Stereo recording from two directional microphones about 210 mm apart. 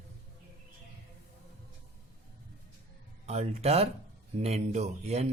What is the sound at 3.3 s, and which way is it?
Speech, 30° right (ahead or behind).